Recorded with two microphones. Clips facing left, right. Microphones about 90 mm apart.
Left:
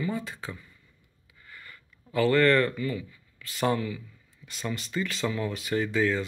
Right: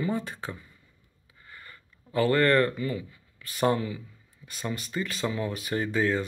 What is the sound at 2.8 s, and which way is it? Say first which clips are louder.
Speech: even; 30° right (ahead or behind).